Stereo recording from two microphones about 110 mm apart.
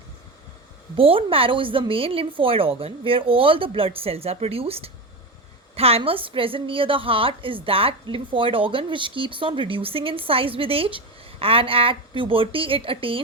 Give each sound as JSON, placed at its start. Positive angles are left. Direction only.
{"t": 0.9, "sound": "a woman's voice", "side_deg": -55}
{"t": 6.0, "sound": "a woman's voice", "side_deg": -55}